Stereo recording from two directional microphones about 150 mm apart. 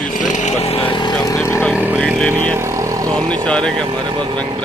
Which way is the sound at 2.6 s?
20° right (ahead or behind).